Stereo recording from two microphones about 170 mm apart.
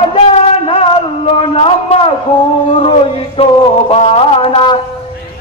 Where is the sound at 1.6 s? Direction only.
35° left (ahead or behind).